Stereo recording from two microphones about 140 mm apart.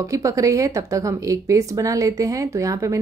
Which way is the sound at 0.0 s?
20° right (ahead or behind).